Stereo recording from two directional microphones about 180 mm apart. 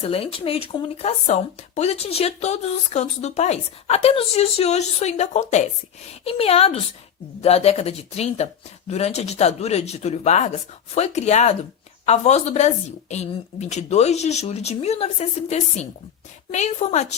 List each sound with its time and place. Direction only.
0.0 s speech: 35° left (ahead or behind)